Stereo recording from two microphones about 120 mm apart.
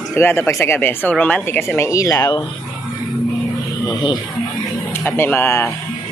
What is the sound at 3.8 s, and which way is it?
Speech, 35° left (ahead or behind).